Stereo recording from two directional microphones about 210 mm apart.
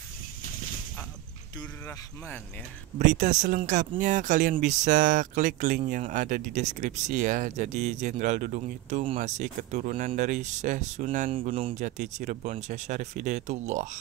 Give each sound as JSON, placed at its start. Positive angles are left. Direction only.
{"t": 3.0, "sound": "speech", "side_deg": -35}